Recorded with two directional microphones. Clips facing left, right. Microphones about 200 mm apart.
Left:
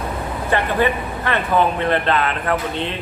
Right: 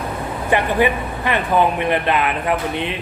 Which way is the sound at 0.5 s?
15° right (ahead or behind).